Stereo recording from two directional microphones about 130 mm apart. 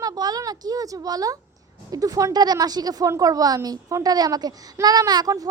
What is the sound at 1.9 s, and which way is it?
A woman's voice, 25° right (ahead or behind).